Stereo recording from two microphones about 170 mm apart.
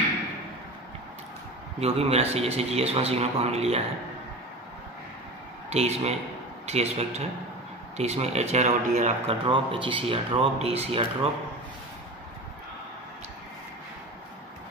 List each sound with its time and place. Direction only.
1.8 s speech: 35° right (ahead or behind)
5.7 s speech: 40° right (ahead or behind)
9.5 s speech: 30° right (ahead or behind)